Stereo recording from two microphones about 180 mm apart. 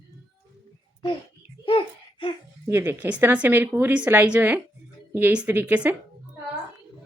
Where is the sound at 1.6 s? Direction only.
30° left (ahead or behind).